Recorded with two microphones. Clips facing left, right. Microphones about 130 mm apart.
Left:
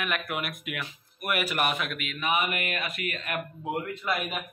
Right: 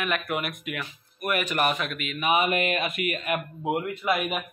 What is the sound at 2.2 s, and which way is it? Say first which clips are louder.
Speech: right 5 dB; 20° right (ahead or behind).